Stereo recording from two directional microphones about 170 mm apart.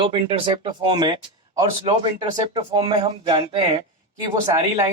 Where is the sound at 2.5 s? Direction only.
25° right (ahead or behind).